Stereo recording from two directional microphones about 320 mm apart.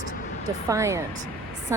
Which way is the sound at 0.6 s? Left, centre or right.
Centre.